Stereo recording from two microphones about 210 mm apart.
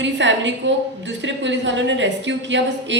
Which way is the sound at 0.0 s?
60° right (ahead or behind).